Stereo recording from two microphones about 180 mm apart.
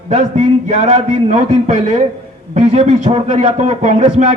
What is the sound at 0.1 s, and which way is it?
A man's voice, 40° right (ahead or behind).